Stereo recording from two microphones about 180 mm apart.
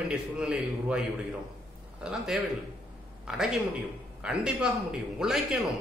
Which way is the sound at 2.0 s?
5° right (ahead or behind).